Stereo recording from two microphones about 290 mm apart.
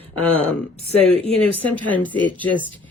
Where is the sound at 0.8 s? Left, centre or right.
Right.